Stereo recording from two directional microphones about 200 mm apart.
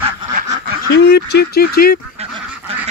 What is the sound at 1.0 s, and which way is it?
Speech, 55° left (ahead or behind).